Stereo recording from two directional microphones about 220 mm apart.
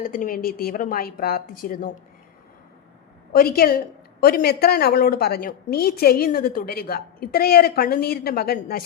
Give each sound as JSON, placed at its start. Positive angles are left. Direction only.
{"t": 0.0, "sound": "a woman's voice", "side_deg": 40}
{"t": 3.3, "sound": "a woman's voice", "side_deg": 45}